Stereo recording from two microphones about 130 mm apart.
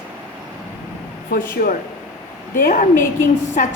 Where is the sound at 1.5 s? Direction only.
90° left.